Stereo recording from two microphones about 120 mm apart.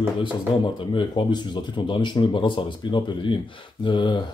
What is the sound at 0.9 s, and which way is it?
Speech, 40° left (ahead or behind).